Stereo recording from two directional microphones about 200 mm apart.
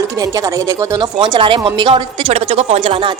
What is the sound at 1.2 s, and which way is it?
A woman's voice, 25° right (ahead or behind).